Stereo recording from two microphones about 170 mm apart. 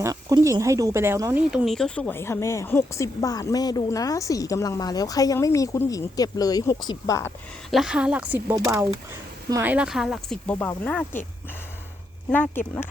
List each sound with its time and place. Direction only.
0.0 s speech: 20° right (ahead or behind); by 7.3 s 15° left (ahead or behind)
7.7 s speech: 5° right (ahead or behind)
12.3 s speech: 10° left (ahead or behind)